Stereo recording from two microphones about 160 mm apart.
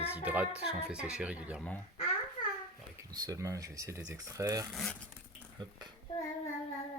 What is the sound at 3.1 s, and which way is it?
Speech, 25° right (ahead or behind).